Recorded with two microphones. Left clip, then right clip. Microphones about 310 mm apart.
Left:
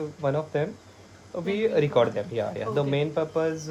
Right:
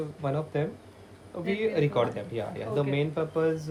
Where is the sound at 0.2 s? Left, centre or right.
Left.